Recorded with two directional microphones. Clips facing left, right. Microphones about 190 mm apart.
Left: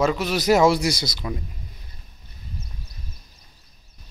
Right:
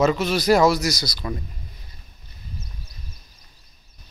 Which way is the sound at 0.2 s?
15° left (ahead or behind).